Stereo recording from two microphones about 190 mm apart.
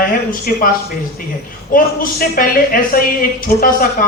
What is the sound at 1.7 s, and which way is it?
A man's voice, 50° left (ahead or behind).